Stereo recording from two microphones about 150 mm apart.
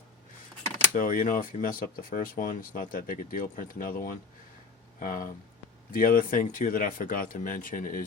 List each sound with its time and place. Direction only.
0.9 s speech: 65° left (ahead or behind)